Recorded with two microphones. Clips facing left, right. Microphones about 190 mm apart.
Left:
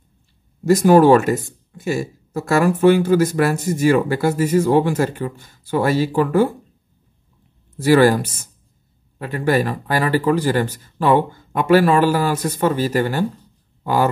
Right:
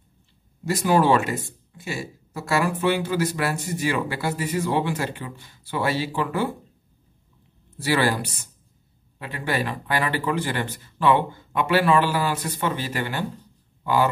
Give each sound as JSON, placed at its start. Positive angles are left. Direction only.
{"t": 0.7, "sound": "speech", "side_deg": 45}
{"t": 7.8, "sound": "speech", "side_deg": 45}